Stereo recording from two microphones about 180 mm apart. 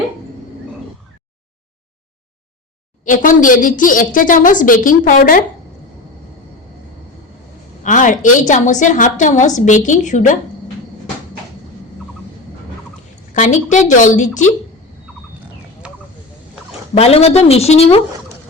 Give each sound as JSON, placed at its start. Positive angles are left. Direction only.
{"t": 3.0, "sound": "a woman's voice", "side_deg": 45}
{"t": 7.9, "sound": "a woman's voice", "side_deg": 45}
{"t": 13.3, "sound": "a woman's voice", "side_deg": 45}
{"t": 15.8, "sound": "a sound", "side_deg": -5}
{"t": 16.9, "sound": "a woman's voice", "side_deg": 35}